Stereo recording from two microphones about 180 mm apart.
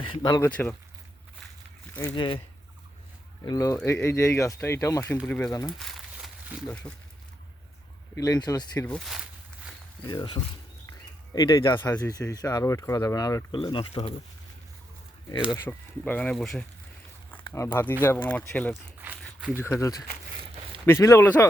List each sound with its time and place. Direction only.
0.0 s speech: 25° left (ahead or behind)
0.5 s speech: 5° left (ahead or behind)
1.9 s a sound: 5° left (ahead or behind)
2.1 s speech: 25° left (ahead or behind)
3.4 s speech: 20° left (ahead or behind)
5.6 s crumpling: centre (ahead or behind)
6.9 s speech: 5° left (ahead or behind)
8.1 s speech: 20° left (ahead or behind)
8.9 s speech: centre (ahead or behind)
10.0 s speech: 25° left (ahead or behind)
15.5 s speech: 10° left (ahead or behind)
17.3 s speech: 15° left (ahead or behind)
18.7 s crumpling: 10° right (ahead or behind)
19.5 s speech: 15° left (ahead or behind)